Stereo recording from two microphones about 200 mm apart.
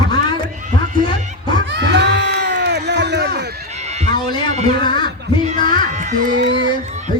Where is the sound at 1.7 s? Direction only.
60° right (ahead or behind).